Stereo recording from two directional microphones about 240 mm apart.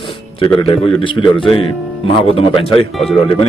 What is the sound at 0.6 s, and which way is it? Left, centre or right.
A man's voice, left.